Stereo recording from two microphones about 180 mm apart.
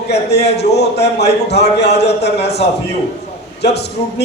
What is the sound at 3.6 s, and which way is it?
Speech, 65° left (ahead or behind).